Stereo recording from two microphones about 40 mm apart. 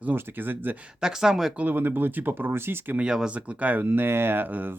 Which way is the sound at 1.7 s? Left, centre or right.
Right.